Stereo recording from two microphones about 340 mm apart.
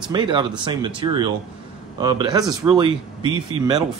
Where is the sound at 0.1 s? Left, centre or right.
Centre.